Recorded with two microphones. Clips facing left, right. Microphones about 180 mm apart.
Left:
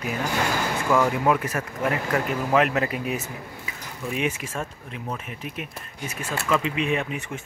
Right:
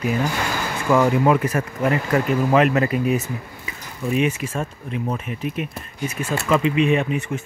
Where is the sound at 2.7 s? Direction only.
10° left (ahead or behind).